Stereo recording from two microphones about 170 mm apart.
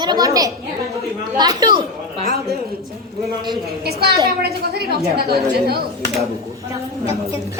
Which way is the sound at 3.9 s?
70° right (ahead or behind).